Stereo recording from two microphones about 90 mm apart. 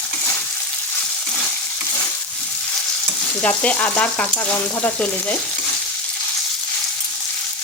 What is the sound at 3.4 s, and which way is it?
Frying, 15° left (ahead or behind).